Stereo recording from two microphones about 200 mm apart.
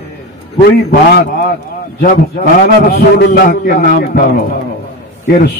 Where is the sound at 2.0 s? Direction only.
45° left (ahead or behind).